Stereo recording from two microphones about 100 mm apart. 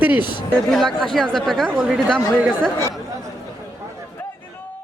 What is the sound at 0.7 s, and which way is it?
Speech, centre (ahead or behind).